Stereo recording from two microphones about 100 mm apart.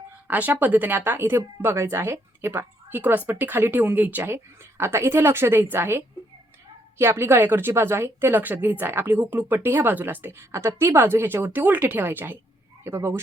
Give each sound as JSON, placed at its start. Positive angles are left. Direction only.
{"t": 0.3, "sound": "a woman's voice", "side_deg": -15}